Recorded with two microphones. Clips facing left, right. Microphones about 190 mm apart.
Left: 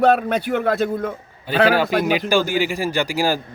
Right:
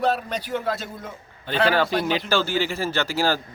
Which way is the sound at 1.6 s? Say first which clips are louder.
Left 4 dB; 10° left (ahead or behind).